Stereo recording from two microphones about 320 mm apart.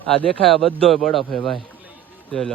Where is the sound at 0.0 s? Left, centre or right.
Centre.